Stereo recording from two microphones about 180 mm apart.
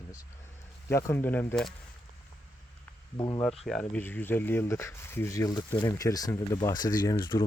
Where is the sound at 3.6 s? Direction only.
5° left (ahead or behind).